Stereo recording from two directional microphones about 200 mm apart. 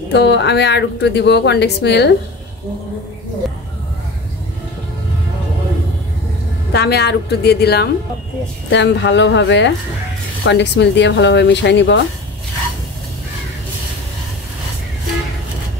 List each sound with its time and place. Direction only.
0.1 s speech: 60° left (ahead or behind)
6.7 s speech: 55° left (ahead or behind)